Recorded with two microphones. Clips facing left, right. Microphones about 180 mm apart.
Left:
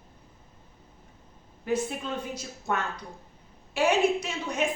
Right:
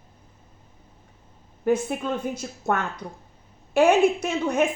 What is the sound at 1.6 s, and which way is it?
A woman's voice, 50° right (ahead or behind).